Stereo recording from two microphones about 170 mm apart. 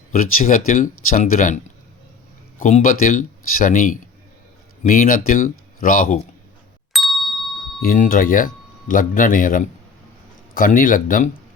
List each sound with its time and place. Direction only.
0.1 s speech: 55° left (ahead or behind)
6.9 s ding: centre (ahead or behind)
7.8 s speech: 50° left (ahead or behind)